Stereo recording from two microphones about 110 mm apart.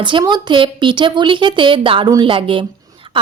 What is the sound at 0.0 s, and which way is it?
Speech, 45° right (ahead or behind).